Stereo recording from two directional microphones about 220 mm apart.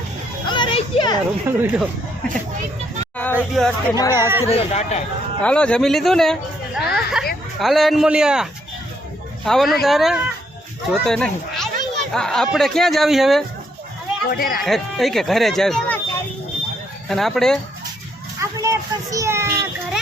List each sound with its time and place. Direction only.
0.4 s a sound: 20° left (ahead or behind)
1.5 s speech: 5° right (ahead or behind)
3.3 s speech: centre (ahead or behind)
4.1 s speech: 10° right (ahead or behind)
4.4 s speech: 30° left (ahead or behind)
5.4 s speech: 5° left (ahead or behind)
6.7 s a sound: centre (ahead or behind)
7.6 s speech: centre (ahead or behind)
14.3 s speech: 40° left (ahead or behind)
14.6 s speech: centre (ahead or behind)
17.1 s speech: centre (ahead or behind)
18.3 s a child's voice: 15° right (ahead or behind)